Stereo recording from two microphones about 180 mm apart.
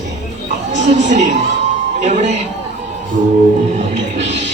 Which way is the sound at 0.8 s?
40° right (ahead or behind).